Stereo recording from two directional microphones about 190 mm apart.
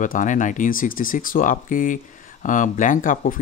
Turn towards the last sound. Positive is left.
turn(degrees=45)  # may be behind; listen again after turning